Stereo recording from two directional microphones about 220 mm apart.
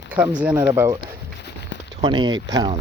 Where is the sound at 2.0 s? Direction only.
20° right (ahead or behind).